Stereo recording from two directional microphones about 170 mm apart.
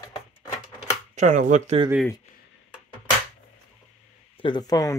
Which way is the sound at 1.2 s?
50° right (ahead or behind).